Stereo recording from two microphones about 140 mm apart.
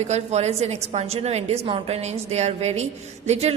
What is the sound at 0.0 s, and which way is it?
A woman's voice, 50° right (ahead or behind).